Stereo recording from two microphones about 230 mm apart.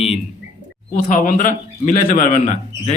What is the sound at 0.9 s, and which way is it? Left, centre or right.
A man's voice, left.